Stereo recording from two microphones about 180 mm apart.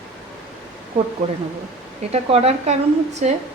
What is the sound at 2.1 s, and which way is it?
A woman's voice, 35° right (ahead or behind).